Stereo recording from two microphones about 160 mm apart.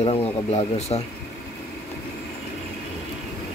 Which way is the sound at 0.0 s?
40° left (ahead or behind).